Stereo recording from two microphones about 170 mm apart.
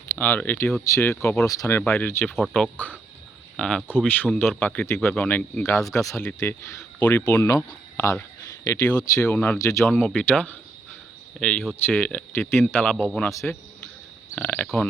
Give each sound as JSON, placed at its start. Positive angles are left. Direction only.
{"t": 0.2, "sound": "a man's voice", "side_deg": 10}
{"t": 9.2, "sound": "speech", "side_deg": 10}
{"t": 9.9, "sound": "a man's voice", "side_deg": 0}
{"t": 14.3, "sound": "speech", "side_deg": 10}